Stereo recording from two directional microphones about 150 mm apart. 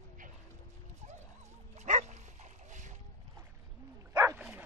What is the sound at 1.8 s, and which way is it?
Dog, 50° right (ahead or behind).